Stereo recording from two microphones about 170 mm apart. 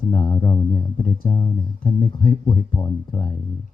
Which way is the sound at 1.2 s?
30° left (ahead or behind).